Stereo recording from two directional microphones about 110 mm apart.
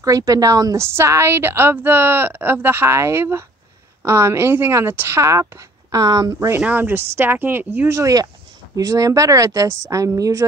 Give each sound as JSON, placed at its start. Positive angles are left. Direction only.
{"t": 0.0, "sound": "a woman's voice", "side_deg": -30}
{"t": 6.6, "sound": "speech", "side_deg": -15}
{"t": 8.0, "sound": "speech", "side_deg": -35}